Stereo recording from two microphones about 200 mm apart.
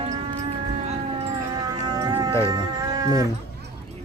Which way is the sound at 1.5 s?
20° right (ahead or behind).